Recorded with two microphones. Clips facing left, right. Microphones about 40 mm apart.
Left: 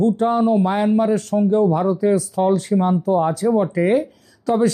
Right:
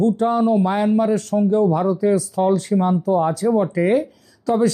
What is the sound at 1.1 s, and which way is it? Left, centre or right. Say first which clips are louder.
Speech: even; left.